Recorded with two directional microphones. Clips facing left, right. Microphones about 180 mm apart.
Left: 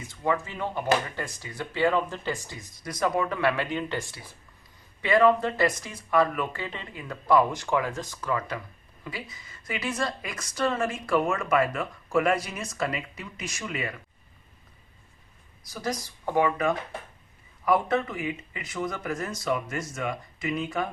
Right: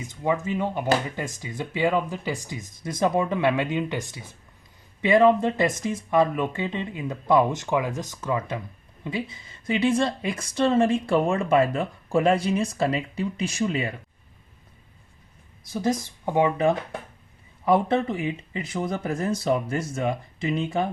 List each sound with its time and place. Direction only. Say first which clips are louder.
0.1 s speech: right 3 dB; 15° right (ahead or behind)
15.7 s speech: right 7 dB; 25° right (ahead or behind)